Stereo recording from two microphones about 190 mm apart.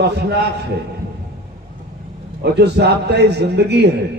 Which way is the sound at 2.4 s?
60° right (ahead or behind).